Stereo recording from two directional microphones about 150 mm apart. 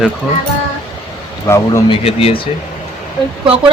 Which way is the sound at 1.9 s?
40° left (ahead or behind).